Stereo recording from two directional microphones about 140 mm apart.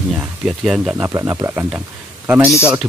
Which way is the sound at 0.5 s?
Centre (ahead or behind).